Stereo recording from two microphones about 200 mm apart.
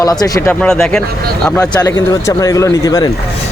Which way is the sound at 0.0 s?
20° left (ahead or behind).